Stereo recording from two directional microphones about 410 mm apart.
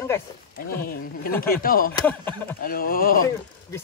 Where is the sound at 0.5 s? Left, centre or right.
Left.